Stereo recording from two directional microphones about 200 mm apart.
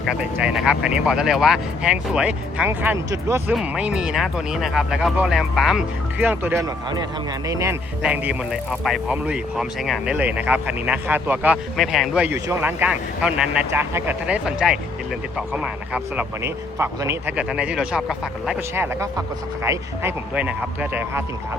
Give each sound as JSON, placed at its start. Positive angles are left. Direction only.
{"t": 0.0, "sound": "speech", "side_deg": -5}